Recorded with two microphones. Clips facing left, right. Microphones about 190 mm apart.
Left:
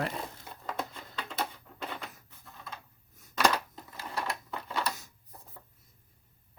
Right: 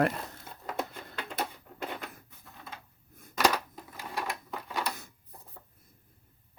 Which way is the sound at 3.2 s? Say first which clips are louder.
Right 8 dB; 55° right (ahead or behind).